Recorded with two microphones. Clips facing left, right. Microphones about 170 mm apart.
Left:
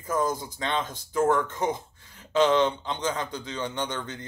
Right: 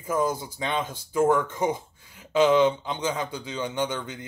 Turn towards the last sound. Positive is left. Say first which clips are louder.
# right 3 dB
turn(degrees=-10)  # may be behind; listen again after turning